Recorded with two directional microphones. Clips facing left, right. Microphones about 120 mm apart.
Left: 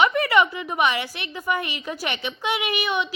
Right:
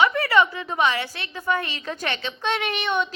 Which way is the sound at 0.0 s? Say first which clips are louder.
Even; 20° left (ahead or behind).